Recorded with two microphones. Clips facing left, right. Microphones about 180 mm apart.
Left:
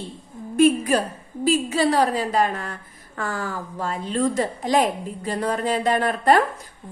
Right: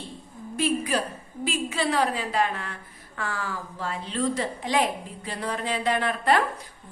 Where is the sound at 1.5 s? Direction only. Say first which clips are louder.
Left 7 dB; 40° left (ahead or behind).